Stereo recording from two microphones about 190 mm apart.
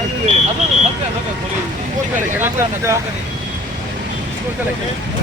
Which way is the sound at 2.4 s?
15° right (ahead or behind).